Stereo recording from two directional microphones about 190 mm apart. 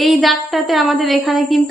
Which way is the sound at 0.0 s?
Centre (ahead or behind).